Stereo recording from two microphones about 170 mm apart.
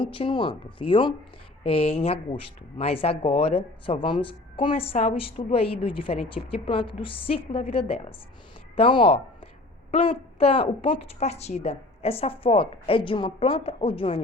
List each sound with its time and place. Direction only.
0.0 s a woman's voice: 30° left (ahead or behind)